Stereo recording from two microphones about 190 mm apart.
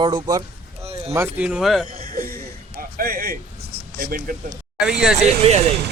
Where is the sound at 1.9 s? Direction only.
50° right (ahead or behind).